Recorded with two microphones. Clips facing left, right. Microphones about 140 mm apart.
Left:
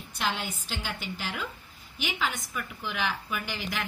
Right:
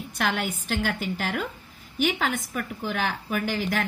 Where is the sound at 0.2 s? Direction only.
60° right (ahead or behind).